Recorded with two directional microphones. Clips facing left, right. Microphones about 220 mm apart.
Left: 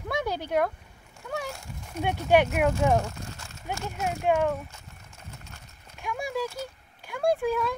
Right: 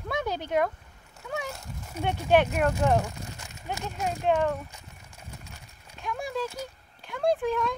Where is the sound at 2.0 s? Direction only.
10° left (ahead or behind).